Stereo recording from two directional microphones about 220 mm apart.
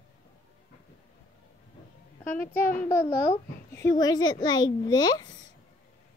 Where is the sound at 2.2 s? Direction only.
10° left (ahead or behind).